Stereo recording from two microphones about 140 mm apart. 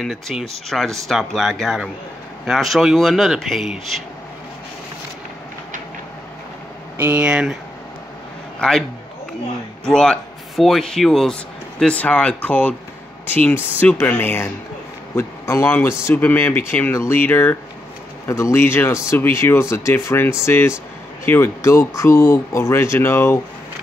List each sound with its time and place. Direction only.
0.0 s speech: centre (ahead or behind)
7.0 s speech: 10° right (ahead or behind)
8.5 s a man's voice: 5° left (ahead or behind)
9.8 s a man's voice: 5° left (ahead or behind)